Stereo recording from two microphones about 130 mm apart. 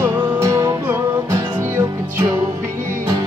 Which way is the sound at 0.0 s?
25° right (ahead or behind).